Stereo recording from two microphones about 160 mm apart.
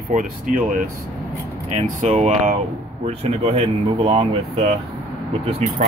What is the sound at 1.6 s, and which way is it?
Speech, 45° right (ahead or behind).